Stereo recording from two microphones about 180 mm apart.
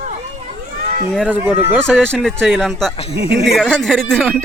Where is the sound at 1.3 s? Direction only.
10° right (ahead or behind).